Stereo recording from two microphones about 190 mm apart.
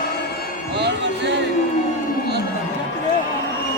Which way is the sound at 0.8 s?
65° right (ahead or behind).